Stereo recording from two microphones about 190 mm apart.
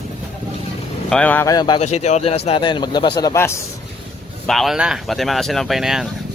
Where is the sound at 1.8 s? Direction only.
35° left (ahead or behind); by 3.6 s 15° left (ahead or behind).